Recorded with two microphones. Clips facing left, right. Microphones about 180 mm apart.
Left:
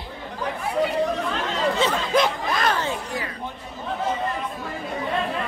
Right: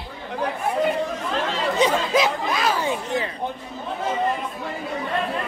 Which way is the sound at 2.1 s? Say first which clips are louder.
Even; 5° right (ahead or behind).